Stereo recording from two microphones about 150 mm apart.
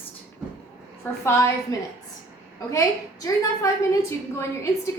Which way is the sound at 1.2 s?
20° left (ahead or behind).